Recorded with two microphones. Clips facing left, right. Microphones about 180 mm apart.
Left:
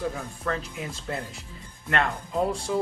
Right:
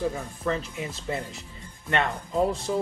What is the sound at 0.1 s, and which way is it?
Speech, 5° right (ahead or behind).